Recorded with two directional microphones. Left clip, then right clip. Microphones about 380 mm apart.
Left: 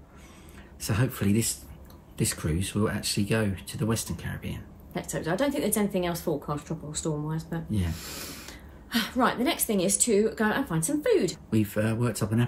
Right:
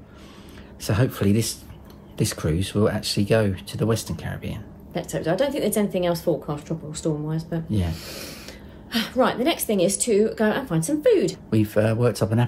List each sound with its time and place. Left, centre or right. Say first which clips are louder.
0.8 s speech: right 6 dB; centre
11.5 s speech: right 8 dB; centre